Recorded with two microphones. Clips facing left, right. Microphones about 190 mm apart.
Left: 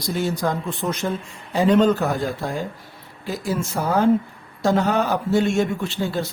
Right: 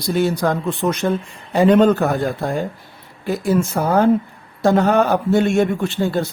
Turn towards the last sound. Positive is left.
turn(degrees=-55)  # may be behind; listen again after turning